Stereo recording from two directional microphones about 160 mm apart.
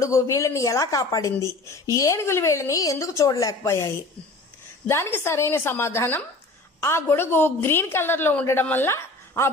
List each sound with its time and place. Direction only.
0.0 s a woman's voice: 20° left (ahead or behind)